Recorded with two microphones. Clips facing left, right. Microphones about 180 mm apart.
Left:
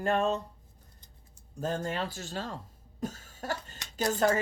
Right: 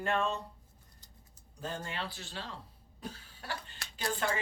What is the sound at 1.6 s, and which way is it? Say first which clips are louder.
Speech: left 7 dB; 45° left (ahead or behind).